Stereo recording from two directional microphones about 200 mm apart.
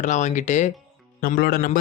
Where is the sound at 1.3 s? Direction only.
50° left (ahead or behind).